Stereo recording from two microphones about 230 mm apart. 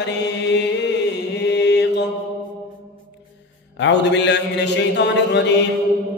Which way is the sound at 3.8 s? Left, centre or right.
Left.